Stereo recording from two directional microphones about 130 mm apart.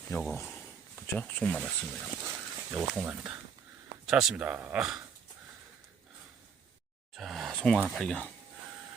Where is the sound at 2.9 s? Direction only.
10° right (ahead or behind).